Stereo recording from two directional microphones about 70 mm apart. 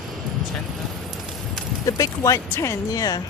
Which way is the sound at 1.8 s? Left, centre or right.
Left.